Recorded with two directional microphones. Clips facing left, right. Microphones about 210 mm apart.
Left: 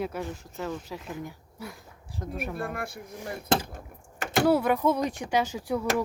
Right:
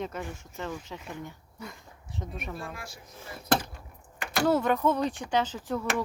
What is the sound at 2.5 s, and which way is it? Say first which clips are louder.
Speech: left 7 dB; 60° left (ahead or behind).